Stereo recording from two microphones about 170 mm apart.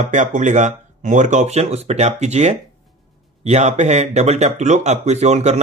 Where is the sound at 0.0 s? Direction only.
45° right (ahead or behind).